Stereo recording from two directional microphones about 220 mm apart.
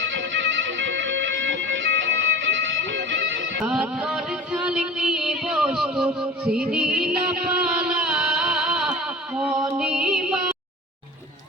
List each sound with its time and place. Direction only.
0.0 s music: 55° right (ahead or behind)
3.6 s music: 5° right (ahead or behind)